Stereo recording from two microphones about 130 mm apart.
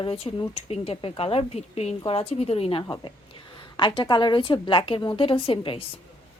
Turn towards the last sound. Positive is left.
turn(degrees=45)  # may be behind; listen again after turning